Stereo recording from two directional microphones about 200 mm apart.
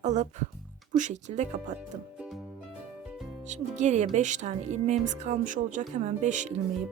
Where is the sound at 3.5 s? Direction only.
35° right (ahead or behind).